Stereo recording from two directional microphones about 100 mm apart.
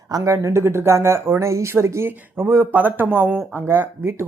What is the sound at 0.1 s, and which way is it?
Speech, 30° right (ahead or behind).